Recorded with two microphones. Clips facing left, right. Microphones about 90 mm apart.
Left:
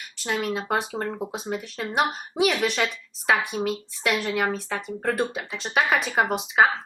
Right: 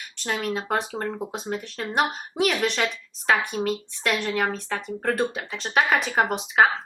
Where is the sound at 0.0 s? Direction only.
Centre (ahead or behind).